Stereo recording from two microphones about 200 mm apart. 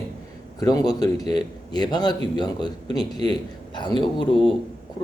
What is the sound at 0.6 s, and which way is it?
A man's voice, 20° left (ahead or behind).